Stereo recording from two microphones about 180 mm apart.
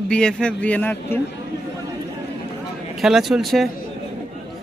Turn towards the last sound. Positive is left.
turn(degrees=0)  # may be behind; listen again after turning